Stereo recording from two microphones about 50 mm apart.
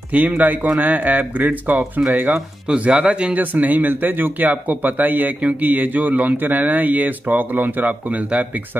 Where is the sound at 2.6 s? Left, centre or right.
Right.